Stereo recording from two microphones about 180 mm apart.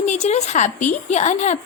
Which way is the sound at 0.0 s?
40° left (ahead or behind).